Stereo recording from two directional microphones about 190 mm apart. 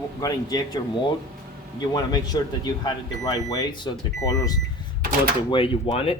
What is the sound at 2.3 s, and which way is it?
Speech, 20° left (ahead or behind).